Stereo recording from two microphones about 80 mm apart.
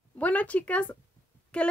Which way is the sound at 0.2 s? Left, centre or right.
Centre.